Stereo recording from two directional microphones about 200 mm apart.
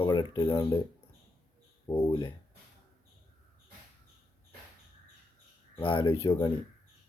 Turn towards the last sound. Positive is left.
turn(degrees=15)  # may be behind; listen again after turning